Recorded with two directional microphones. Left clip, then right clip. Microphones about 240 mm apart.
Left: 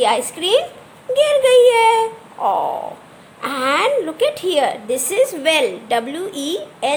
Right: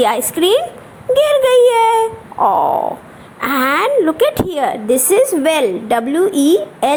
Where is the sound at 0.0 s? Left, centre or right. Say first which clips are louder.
Right 3 dB; right.